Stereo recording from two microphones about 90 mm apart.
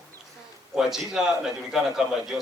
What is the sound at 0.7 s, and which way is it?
A man's voice, 5° right (ahead or behind).